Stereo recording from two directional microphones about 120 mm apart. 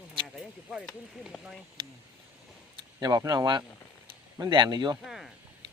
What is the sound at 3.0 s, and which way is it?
Speech, 35° right (ahead or behind).